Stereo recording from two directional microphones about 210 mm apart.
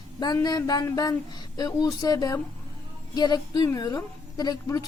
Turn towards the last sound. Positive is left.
turn(degrees=20)  # may be behind; listen again after turning